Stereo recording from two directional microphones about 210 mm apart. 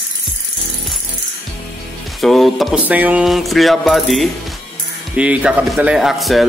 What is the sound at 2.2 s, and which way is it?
Speech, centre (ahead or behind).